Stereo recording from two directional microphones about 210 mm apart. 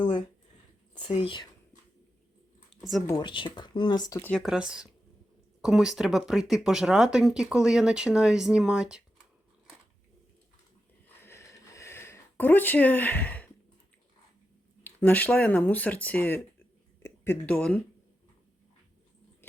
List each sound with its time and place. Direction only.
0.9 s speech: 25° left (ahead or behind)
3.1 s speech: 20° left (ahead or behind); by 9.0 s 5° right (ahead or behind)
11.2 s a sound: 10° left (ahead or behind)
14.8 s speech: 10° left (ahead or behind)